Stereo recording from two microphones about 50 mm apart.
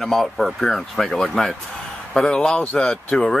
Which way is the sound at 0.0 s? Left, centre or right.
Centre.